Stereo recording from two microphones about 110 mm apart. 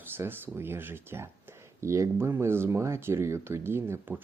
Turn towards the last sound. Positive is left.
turn(degrees=-20)  # may be behind; listen again after turning